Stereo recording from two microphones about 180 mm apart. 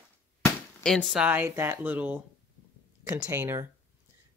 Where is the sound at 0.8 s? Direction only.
Centre (ahead or behind).